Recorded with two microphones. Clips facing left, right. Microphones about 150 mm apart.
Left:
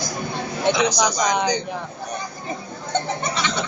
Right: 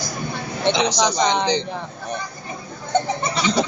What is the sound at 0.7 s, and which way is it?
Speech, 25° right (ahead or behind).